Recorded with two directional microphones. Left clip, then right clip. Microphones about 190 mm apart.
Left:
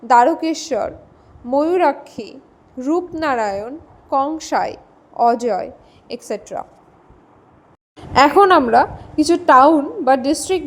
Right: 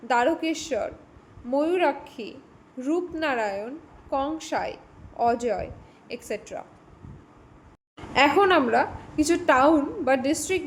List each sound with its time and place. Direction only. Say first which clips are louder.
0.1 s a woman's voice: left 10 dB; 25° left (ahead or behind)
8.1 s a woman's voice: left 8 dB; 30° left (ahead or behind)